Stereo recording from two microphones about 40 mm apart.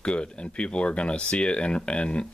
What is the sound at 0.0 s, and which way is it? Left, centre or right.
Speech, left.